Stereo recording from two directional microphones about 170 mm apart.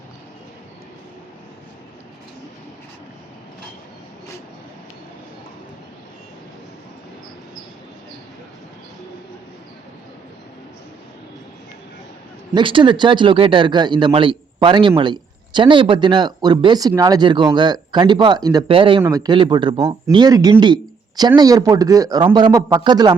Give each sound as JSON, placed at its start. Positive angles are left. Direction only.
{"t": 12.5, "sound": "a man's voice", "side_deg": -30}